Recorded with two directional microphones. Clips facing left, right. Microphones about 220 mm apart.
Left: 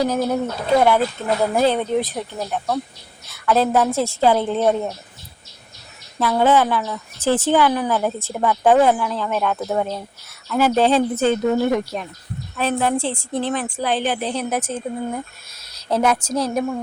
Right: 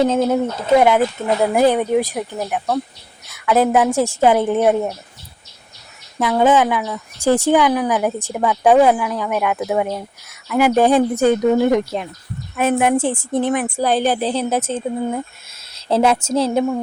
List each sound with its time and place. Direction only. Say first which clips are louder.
0.0 s speech: right 4 dB; 25° right (ahead or behind)
6.3 s speech: right 2 dB; 15° right (ahead or behind)
13.8 s speech: right 4 dB; 40° right (ahead or behind)